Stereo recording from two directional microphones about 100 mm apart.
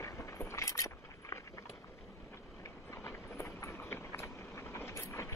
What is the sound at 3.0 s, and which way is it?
Train, 25° left (ahead or behind).